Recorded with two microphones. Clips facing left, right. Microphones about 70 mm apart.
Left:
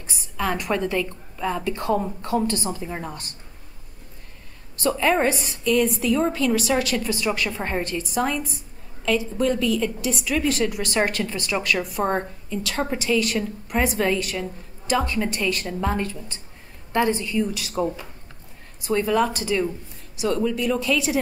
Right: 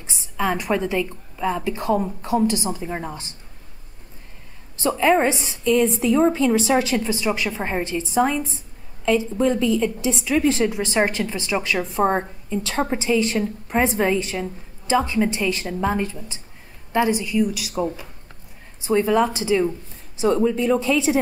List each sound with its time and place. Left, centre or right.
0.0 s a woman's voice: centre
4.8 s a woman's voice: centre
18.9 s a woman's voice: right